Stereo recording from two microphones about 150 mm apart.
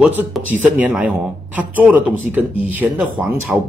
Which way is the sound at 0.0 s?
10° right (ahead or behind).